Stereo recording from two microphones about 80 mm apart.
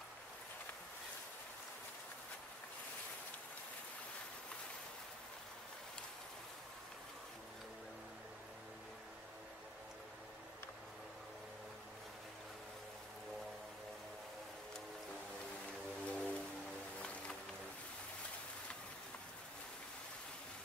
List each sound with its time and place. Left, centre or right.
16.1 s music: centre